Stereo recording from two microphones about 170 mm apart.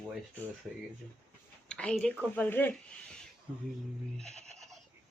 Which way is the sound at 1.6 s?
5° left (ahead or behind).